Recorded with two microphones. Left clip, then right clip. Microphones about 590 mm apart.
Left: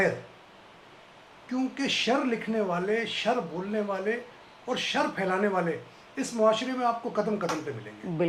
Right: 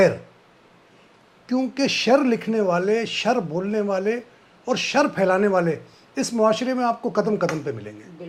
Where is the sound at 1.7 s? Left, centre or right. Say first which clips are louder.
Right 8 dB; right.